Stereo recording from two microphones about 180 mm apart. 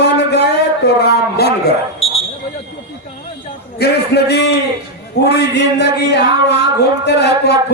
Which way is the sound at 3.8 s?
65° left (ahead or behind).